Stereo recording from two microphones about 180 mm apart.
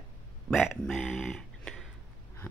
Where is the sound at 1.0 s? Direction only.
5° left (ahead or behind).